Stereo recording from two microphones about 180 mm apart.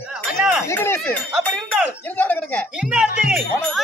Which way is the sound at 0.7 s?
15° left (ahead or behind).